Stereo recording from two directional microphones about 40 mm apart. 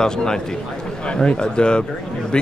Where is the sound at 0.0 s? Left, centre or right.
Centre.